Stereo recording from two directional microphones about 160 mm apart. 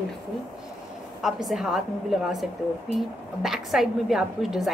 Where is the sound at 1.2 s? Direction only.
Centre (ahead or behind).